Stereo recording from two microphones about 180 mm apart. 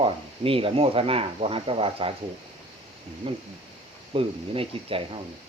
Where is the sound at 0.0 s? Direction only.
30° right (ahead or behind).